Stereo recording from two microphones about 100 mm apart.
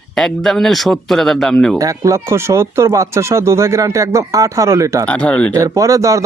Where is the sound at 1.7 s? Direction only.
35° right (ahead or behind).